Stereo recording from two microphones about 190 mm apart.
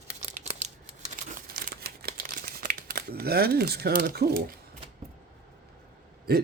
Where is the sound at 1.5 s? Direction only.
55° right (ahead or behind).